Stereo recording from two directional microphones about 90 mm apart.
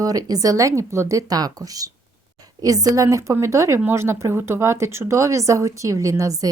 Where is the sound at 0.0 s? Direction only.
45° right (ahead or behind).